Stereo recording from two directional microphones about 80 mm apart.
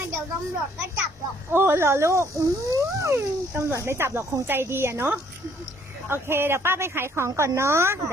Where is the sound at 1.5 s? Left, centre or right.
Right.